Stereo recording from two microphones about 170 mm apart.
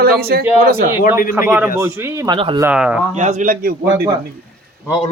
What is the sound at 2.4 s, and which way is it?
Speech, 30° right (ahead or behind).